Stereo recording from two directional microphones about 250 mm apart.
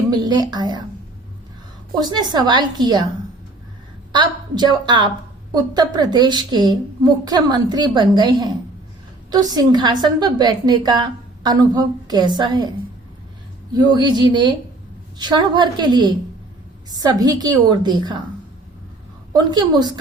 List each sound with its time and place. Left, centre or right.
0.1 s a woman's voice: centre
2.0 s a woman's voice: centre
4.1 s a woman's voice: centre
13.7 s a woman's voice: centre
19.3 s a woman's voice: centre